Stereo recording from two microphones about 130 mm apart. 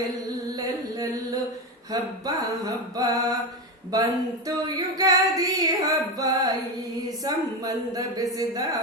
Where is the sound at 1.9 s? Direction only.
30° right (ahead or behind).